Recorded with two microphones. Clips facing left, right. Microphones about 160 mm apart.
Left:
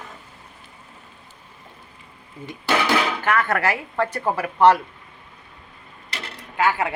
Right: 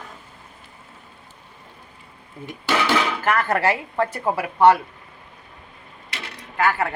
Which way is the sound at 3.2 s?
35° right (ahead or behind).